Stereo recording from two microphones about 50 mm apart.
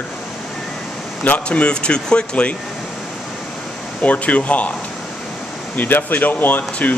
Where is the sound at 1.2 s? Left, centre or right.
Left.